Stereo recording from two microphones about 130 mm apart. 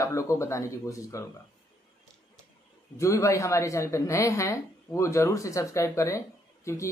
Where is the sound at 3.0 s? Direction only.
25° left (ahead or behind).